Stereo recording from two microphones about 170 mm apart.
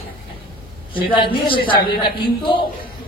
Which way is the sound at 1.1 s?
30° left (ahead or behind).